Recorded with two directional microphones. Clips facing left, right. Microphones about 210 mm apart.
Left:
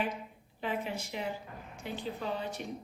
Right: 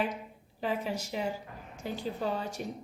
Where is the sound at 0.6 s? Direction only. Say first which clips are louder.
Right 3 dB; 40° right (ahead or behind).